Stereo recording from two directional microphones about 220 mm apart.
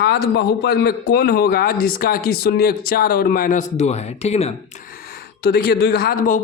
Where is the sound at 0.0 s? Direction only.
50° left (ahead or behind); by 4.5 s 30° left (ahead or behind).